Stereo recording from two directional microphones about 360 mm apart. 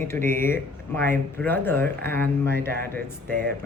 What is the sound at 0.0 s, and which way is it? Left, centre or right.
A woman's voice, centre.